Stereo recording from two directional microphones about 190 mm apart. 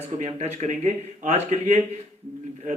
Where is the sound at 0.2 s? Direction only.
35° right (ahead or behind).